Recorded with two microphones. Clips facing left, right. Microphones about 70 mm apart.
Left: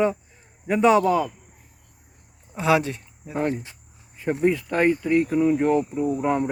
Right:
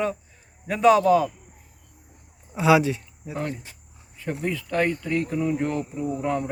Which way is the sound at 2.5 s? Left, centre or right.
Centre.